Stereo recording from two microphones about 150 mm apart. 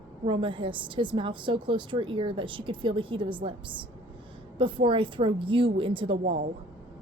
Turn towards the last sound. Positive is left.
turn(degrees=-35)  # may be behind; listen again after turning